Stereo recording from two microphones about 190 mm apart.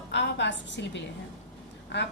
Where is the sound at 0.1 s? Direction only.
65° left (ahead or behind).